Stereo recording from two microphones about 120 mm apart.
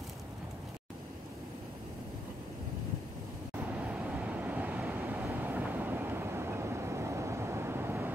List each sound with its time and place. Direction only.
3.5 s vehicle: 15° right (ahead or behind)